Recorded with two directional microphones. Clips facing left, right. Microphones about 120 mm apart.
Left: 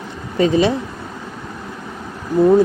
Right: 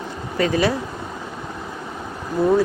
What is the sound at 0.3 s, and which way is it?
Speech, 20° left (ahead or behind).